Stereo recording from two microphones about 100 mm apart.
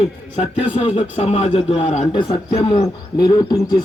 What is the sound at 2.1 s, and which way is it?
Speech, 55° left (ahead or behind).